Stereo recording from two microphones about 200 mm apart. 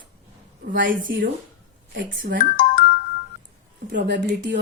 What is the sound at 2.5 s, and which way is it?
Music, 45° left (ahead or behind).